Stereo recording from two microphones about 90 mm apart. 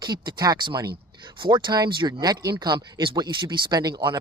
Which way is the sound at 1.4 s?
60° right (ahead or behind).